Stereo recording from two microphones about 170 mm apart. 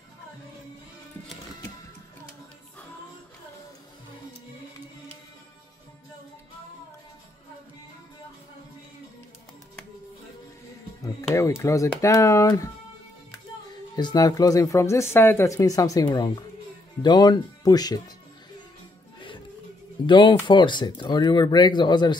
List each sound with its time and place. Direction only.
11.3 s speech: 15° left (ahead or behind)
13.9 s speech: 25° left (ahead or behind)
20.1 s speech: 30° left (ahead or behind)